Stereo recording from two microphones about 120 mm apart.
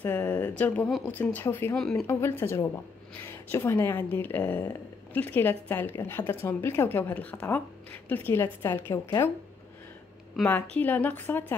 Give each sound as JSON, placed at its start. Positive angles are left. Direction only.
{"t": 0.0, "sound": "speech", "side_deg": 15}
{"t": 0.8, "sound": "speech", "side_deg": 0}
{"t": 1.1, "sound": "a woman's voice", "side_deg": 15}
{"t": 1.8, "sound": "speech", "side_deg": 5}
{"t": 2.0, "sound": "a woman's voice", "side_deg": 20}
{"t": 10.4, "sound": "a woman's voice", "side_deg": 10}